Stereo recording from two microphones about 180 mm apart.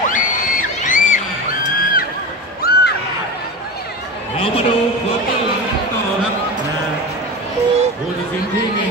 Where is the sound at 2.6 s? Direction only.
60° left (ahead or behind).